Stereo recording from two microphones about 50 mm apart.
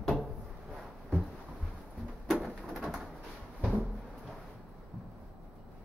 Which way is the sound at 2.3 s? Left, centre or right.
Centre.